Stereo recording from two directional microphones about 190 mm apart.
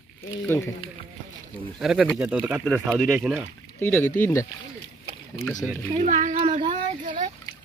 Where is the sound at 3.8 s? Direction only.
10° left (ahead or behind).